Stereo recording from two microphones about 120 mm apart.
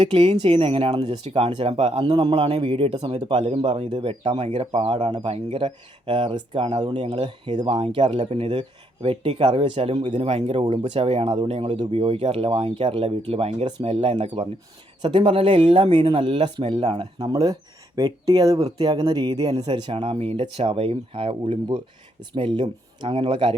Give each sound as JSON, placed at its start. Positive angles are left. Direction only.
{"t": 0.0, "sound": "speech", "side_deg": -50}
{"t": 7.7, "sound": "speech", "side_deg": -50}
{"t": 17.2, "sound": "speech", "side_deg": -35}